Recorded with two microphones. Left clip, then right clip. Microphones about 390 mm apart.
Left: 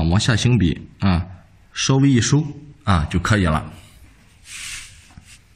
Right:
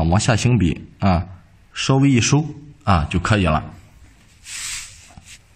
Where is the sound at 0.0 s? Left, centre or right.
Centre.